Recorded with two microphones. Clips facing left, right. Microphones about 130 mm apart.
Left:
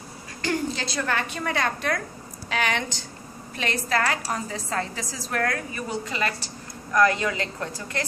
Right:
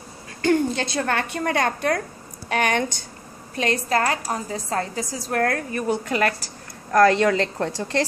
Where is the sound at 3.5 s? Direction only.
40° right (ahead or behind); by 6.3 s 55° right (ahead or behind).